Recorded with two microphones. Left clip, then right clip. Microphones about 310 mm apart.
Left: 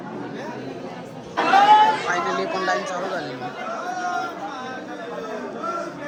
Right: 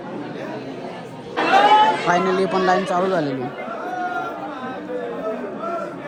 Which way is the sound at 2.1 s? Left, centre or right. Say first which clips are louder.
Right 5 dB; right.